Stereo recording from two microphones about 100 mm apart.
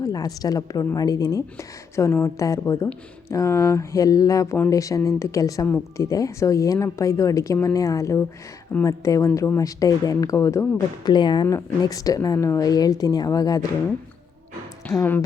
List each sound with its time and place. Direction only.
0.0 s a woman's voice: 40° left (ahead or behind)
11.0 s speech: 50° left (ahead or behind)
11.4 s a woman's voice: 35° left (ahead or behind)
14.9 s a woman's voice: 35° left (ahead or behind)